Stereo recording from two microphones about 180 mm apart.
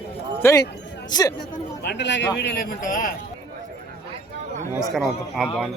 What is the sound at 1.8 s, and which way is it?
A man's voice, 70° left (ahead or behind).